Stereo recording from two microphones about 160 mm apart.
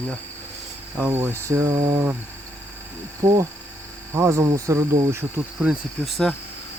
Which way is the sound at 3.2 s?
25° right (ahead or behind).